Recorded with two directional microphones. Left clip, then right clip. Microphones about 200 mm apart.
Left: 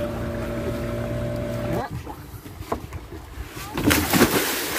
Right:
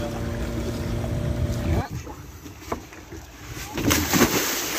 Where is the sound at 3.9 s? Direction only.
25° left (ahead or behind).